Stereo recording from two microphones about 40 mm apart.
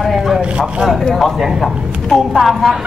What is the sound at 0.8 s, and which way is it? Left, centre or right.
A man's voice, centre.